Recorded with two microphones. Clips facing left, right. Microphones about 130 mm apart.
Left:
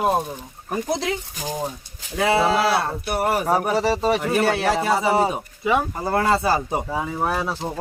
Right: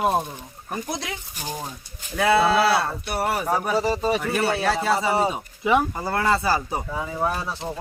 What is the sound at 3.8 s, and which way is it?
Speech, 75° left (ahead or behind).